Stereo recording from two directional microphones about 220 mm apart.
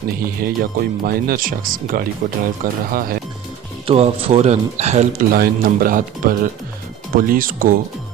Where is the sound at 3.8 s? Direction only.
25° right (ahead or behind).